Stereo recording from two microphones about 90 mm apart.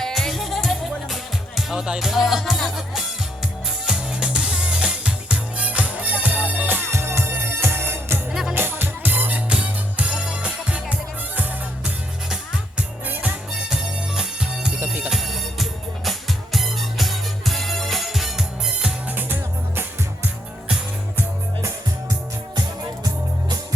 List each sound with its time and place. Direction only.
0.0 s music: 5° left (ahead or behind); by 8.2 s 25° right (ahead or behind)
8.3 s music: 10° right (ahead or behind)
8.5 s music: 25° right (ahead or behind)
13.7 s music: 5° right (ahead or behind)
19.1 s music: 25° right (ahead or behind)